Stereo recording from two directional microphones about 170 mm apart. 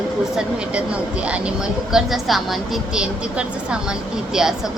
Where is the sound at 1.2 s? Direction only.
5° right (ahead or behind).